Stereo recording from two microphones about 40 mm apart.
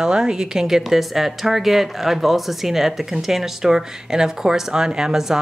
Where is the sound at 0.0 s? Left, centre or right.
Centre.